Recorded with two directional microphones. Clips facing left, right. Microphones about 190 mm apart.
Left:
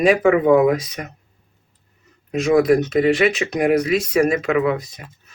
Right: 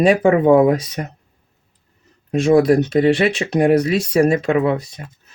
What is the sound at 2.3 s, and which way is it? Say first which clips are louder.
Speech: right 2 dB; 30° right (ahead or behind).